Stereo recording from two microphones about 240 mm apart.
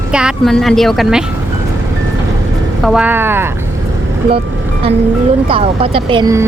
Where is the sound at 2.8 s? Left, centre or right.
Centre.